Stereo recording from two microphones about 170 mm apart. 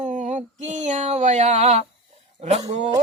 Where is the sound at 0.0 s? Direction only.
45° right (ahead or behind).